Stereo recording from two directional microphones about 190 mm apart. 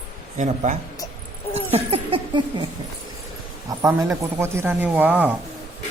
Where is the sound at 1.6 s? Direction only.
30° right (ahead or behind).